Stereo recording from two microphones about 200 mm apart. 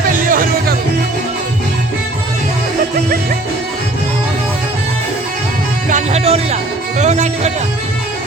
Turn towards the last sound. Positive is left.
turn(degrees=-35)  # may be behind; listen again after turning